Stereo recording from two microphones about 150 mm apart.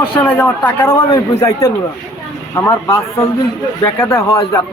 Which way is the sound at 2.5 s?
15° left (ahead or behind).